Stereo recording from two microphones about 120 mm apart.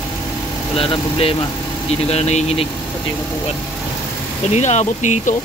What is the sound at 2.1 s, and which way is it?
Speech, 65° left (ahead or behind).